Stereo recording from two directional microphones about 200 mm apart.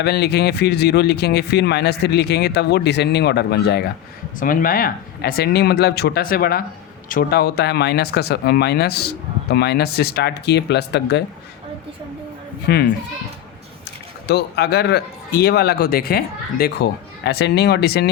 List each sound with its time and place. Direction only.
0.0 s speech: 55° left (ahead or behind)
4.4 s speech: 45° left (ahead or behind)
12.6 s speech: 55° left (ahead or behind)
14.3 s speech: 55° left (ahead or behind)